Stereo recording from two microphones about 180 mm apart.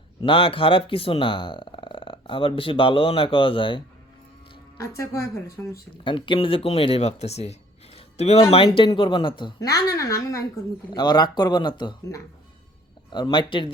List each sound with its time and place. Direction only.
0.2 s speech: 30° left (ahead or behind)
4.8 s a woman's voice: 15° left (ahead or behind)
6.1 s speech: 25° left (ahead or behind)